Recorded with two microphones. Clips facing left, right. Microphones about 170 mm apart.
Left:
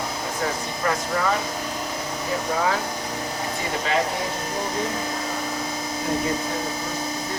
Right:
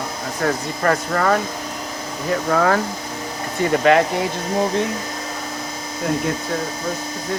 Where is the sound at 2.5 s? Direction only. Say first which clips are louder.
Right 7 dB; 70° right (ahead or behind).